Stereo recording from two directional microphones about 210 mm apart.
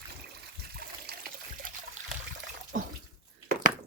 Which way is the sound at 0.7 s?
45° right (ahead or behind).